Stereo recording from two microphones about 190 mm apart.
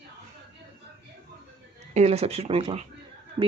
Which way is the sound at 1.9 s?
35° right (ahead or behind).